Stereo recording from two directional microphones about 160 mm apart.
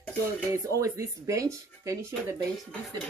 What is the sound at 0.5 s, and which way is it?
Speech, 20° right (ahead or behind).